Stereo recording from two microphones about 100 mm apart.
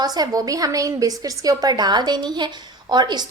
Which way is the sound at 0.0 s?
40° right (ahead or behind).